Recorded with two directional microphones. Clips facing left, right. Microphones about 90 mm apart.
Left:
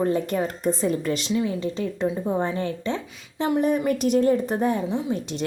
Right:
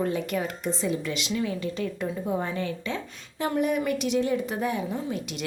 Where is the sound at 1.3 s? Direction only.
25° left (ahead or behind).